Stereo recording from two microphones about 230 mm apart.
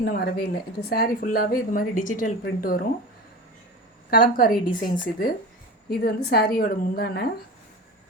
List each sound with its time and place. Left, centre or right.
0.0 s a woman's voice: left
4.1 s a woman's voice: left